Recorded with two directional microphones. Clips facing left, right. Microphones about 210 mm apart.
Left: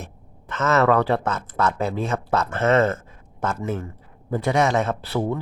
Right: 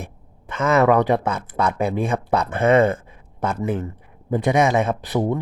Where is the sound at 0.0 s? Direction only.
10° right (ahead or behind).